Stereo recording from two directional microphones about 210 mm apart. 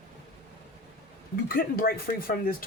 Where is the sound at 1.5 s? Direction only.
45° left (ahead or behind).